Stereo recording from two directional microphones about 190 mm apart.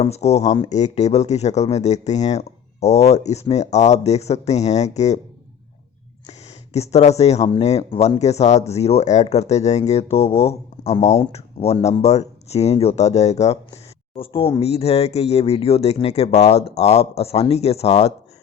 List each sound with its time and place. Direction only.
0.0 s speech: 35° left (ahead or behind)
6.7 s speech: 35° left (ahead or behind)